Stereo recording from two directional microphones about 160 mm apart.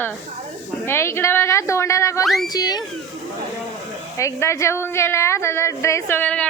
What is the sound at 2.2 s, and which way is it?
Speech, centre (ahead or behind).